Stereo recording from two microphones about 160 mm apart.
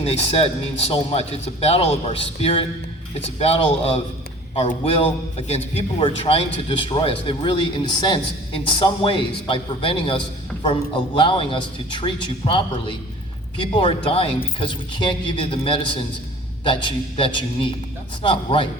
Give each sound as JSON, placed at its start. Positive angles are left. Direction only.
{"t": 0.0, "sound": "a man's voice", "side_deg": 40}